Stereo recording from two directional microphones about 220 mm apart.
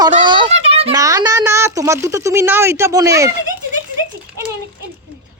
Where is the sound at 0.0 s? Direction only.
20° right (ahead or behind).